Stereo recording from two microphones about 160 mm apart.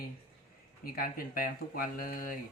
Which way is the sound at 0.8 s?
65° left (ahead or behind).